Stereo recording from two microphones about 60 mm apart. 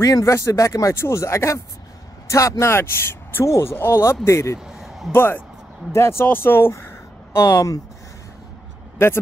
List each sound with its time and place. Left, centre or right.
0.0 s speech: left
3.4 s speech: left
3.7 s speech: left
4.6 s a sound: centre
5.1 s speech: left
6.7 s a sound: left
8.9 s speech: left